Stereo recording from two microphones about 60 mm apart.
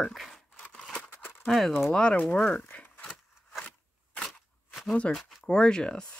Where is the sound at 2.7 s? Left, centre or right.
Left.